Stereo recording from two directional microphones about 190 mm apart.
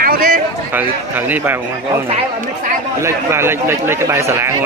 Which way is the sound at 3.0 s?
15° right (ahead or behind).